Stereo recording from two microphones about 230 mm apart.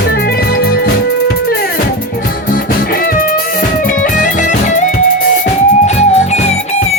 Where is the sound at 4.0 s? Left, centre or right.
Left.